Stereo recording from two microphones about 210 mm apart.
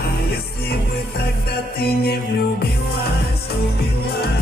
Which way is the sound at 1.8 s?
50° left (ahead or behind).